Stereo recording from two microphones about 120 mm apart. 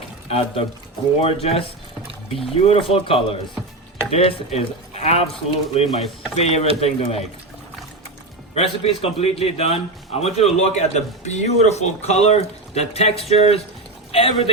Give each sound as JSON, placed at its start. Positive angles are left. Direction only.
{"t": 0.3, "sound": "a man's voice", "side_deg": 55}
{"t": 8.5, "sound": "a man's voice", "side_deg": 55}